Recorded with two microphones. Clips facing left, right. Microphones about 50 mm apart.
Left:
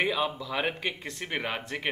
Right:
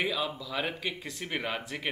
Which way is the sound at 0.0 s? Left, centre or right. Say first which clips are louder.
Left 3 dB; left.